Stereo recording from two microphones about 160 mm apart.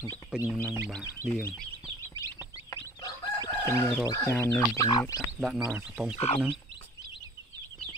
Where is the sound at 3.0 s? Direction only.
20° left (ahead or behind).